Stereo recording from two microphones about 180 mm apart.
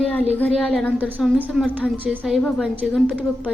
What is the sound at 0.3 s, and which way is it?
A woman's voice, 5° left (ahead or behind).